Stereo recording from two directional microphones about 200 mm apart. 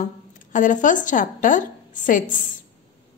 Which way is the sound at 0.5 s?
40° left (ahead or behind).